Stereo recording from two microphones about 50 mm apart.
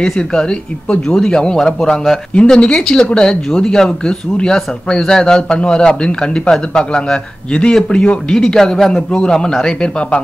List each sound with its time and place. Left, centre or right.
0.0 s a man's voice: centre